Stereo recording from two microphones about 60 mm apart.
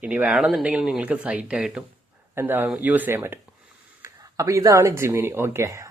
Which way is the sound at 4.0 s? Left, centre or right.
Right.